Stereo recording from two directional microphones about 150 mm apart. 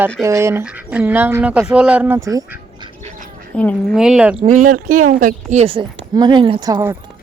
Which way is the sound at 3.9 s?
5° right (ahead or behind).